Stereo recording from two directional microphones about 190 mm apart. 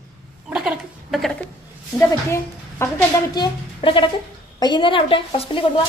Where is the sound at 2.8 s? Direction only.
15° left (ahead or behind).